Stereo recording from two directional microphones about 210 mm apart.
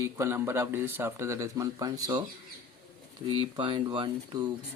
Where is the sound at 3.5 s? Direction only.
25° right (ahead or behind).